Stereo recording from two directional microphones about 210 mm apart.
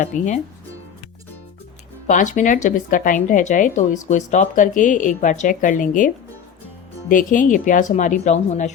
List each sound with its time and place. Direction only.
0.1 s speech: 35° left (ahead or behind)
2.0 s speech: 35° left (ahead or behind)
7.1 s speech: 40° left (ahead or behind)